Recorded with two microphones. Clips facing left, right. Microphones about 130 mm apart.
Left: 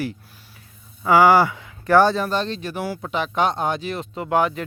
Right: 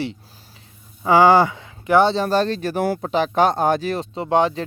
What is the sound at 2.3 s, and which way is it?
Speech, 40° right (ahead or behind).